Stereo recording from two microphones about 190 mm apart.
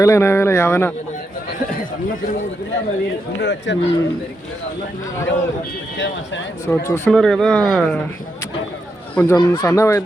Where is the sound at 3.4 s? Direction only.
70° left (ahead or behind).